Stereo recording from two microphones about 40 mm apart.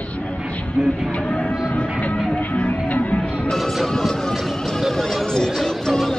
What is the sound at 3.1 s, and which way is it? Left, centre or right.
Music, centre.